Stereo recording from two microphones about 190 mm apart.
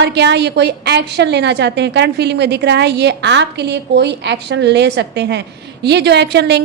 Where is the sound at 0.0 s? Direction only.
65° right (ahead or behind).